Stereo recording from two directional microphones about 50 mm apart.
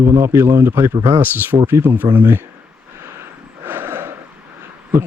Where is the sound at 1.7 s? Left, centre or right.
Right.